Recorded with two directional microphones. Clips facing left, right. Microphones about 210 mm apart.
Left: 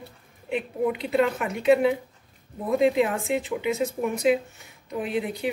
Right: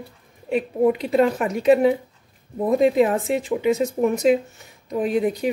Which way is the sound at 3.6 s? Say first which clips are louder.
Right 6 dB; 45° right (ahead or behind).